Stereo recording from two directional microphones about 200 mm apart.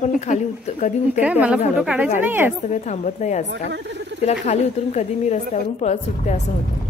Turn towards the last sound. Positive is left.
turn(degrees=35)  # may be behind; listen again after turning